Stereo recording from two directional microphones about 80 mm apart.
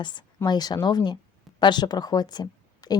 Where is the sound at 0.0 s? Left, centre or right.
Left.